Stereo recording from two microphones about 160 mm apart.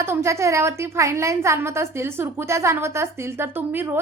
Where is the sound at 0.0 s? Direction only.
20° right (ahead or behind).